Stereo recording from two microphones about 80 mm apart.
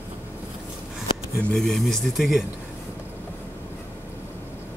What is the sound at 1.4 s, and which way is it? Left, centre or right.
Speech, centre.